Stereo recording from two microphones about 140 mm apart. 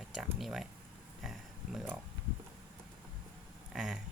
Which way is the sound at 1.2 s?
Centre (ahead or behind).